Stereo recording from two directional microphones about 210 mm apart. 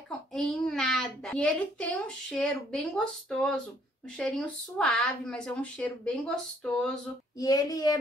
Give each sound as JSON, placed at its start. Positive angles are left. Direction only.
{"t": 0.3, "sound": "a child's voice", "side_deg": 5}
{"t": 7.3, "sound": "speech", "side_deg": 15}